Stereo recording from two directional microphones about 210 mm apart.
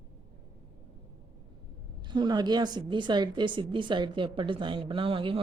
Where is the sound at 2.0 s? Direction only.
20° right (ahead or behind).